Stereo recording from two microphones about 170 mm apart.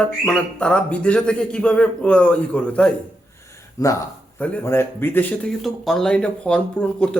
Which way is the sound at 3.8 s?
20° left (ahead or behind).